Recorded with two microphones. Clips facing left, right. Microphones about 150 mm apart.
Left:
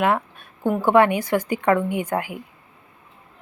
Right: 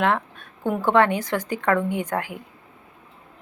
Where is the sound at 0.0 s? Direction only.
10° left (ahead or behind).